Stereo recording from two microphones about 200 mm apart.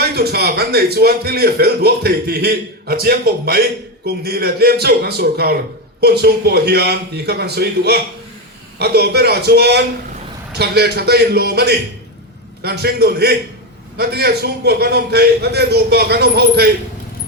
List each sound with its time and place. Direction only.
0.0 s speech: 50° right (ahead or behind)